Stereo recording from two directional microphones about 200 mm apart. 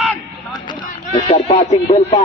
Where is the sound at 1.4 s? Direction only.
35° left (ahead or behind).